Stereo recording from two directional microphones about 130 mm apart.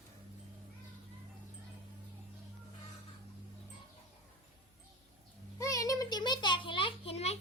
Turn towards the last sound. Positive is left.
turn(degrees=55)  # may be behind; listen again after turning